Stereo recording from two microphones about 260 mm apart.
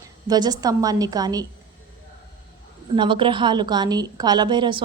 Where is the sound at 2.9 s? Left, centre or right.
Centre.